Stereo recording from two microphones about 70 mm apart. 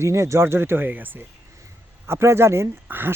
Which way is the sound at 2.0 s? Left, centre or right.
Right.